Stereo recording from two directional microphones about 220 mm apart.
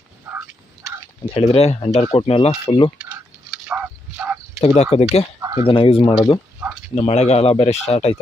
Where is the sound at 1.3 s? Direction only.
25° left (ahead or behind).